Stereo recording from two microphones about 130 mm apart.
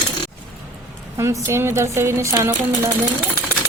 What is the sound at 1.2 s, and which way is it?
A woman's voice, 20° right (ahead or behind).